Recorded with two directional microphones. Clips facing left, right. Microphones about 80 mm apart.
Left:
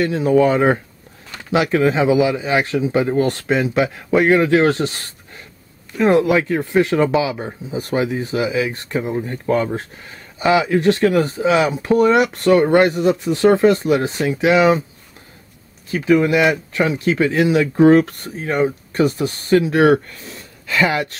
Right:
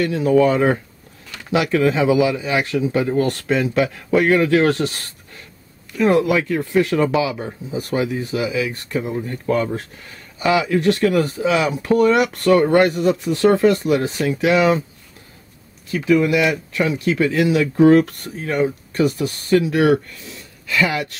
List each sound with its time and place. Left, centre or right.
0.0 s speech: left
15.9 s speech: left